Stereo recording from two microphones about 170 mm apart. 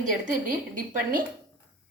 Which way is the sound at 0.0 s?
50° right (ahead or behind).